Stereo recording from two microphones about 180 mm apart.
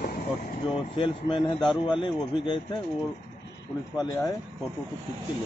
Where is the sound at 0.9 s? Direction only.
30° left (ahead or behind).